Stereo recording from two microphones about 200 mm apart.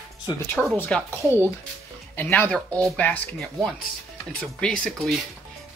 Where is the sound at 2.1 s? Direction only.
10° left (ahead or behind).